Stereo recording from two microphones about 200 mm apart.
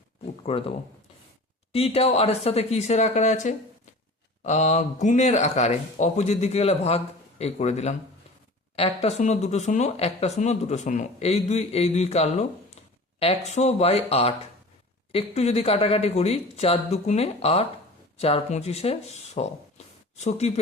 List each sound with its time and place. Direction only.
0.5 s speech: 30° left (ahead or behind)
1.7 s speech: 30° left (ahead or behind)